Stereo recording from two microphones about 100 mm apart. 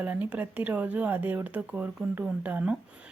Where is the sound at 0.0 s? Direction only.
15° right (ahead or behind).